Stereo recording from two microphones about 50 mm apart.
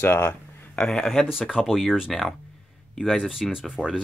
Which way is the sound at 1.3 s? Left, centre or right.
Centre.